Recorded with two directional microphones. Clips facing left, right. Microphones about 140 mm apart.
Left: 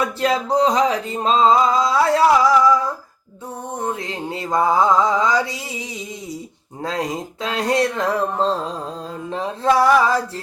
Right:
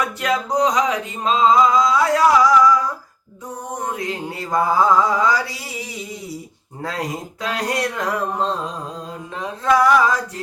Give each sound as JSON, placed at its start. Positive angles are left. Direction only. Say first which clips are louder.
{"t": 0.0, "sound": "music", "louder": "left 2 dB", "side_deg": 30}
{"t": 3.9, "sound": "mantra", "louder": "right 1 dB", "side_deg": 25}
{"t": 6.8, "sound": "mantra", "louder": "left 2 dB", "side_deg": 20}
{"t": 9.3, "sound": "music", "louder": "left 1 dB", "side_deg": 30}